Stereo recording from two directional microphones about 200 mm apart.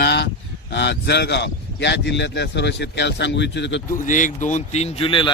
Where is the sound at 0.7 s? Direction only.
60° left (ahead or behind).